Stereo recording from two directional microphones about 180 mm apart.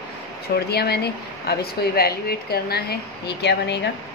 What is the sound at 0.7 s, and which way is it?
Speech, 60° left (ahead or behind).